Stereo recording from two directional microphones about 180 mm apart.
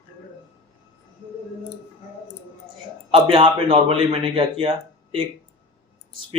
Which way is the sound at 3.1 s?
30° right (ahead or behind).